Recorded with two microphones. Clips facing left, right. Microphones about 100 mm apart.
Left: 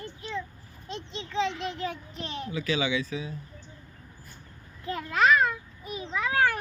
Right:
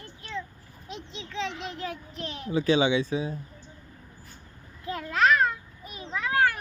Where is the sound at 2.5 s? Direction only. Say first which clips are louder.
Right 6 dB; 30° right (ahead or behind).